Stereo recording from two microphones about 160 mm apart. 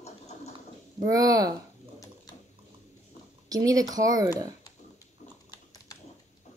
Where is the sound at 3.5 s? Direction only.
20° right (ahead or behind).